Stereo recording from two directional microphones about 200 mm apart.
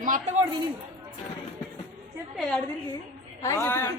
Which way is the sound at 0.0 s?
40° right (ahead or behind).